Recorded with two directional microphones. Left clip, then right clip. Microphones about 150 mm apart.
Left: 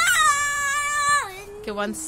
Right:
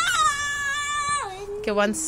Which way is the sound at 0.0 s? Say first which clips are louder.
Left 3 dB; 55° left (ahead or behind).